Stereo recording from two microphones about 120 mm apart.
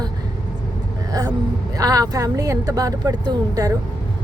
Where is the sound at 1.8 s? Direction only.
30° right (ahead or behind).